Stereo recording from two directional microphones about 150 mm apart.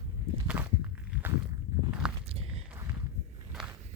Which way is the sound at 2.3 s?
40° right (ahead or behind).